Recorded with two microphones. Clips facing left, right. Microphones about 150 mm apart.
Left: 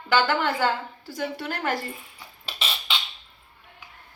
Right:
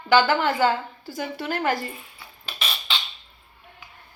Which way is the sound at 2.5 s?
25° left (ahead or behind).